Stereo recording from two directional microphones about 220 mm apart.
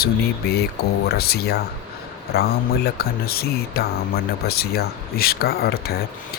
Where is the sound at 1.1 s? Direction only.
45° left (ahead or behind).